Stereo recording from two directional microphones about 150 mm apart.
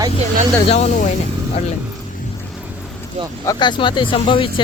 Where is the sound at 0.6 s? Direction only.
40° left (ahead or behind).